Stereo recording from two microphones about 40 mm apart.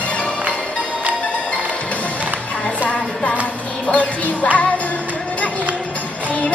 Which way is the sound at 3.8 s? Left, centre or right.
Left.